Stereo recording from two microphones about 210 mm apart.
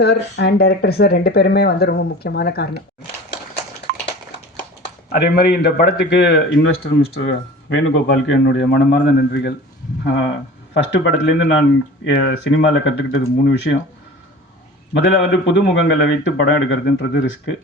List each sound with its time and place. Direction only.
0.0 s speech: 50° left (ahead or behind)
3.9 s a sound: 45° right (ahead or behind)
5.0 s speech: 50° left (ahead or behind)
15.0 s speech: 60° left (ahead or behind)